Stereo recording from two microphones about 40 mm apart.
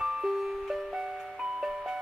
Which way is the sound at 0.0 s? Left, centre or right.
Centre.